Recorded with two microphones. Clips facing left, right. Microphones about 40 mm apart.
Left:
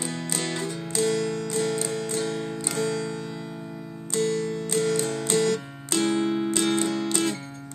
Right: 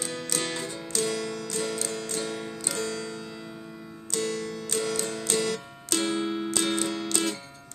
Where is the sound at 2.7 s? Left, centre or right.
Centre.